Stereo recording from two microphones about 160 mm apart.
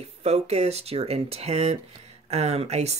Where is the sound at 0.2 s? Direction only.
40° right (ahead or behind).